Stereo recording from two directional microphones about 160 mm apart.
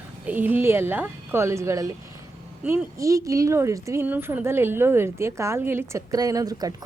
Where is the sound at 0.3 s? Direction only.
10° right (ahead or behind).